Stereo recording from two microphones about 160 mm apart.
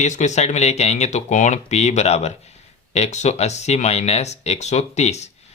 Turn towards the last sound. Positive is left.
turn(degrees=45)  # may be behind; listen again after turning